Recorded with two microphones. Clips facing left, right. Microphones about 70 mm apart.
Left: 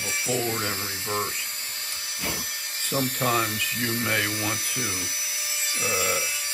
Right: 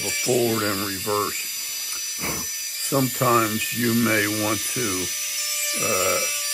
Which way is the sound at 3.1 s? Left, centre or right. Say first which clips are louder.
Right 6 dB; centre.